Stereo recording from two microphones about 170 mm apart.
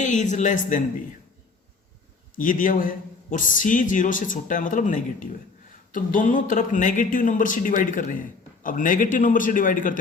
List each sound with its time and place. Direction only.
0.0 s a man's voice: 45° left (ahead or behind)
2.3 s a man's voice: 50° left (ahead or behind)